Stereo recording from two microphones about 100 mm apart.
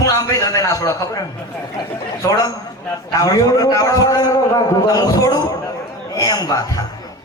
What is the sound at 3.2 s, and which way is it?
A man's voice, 35° left (ahead or behind).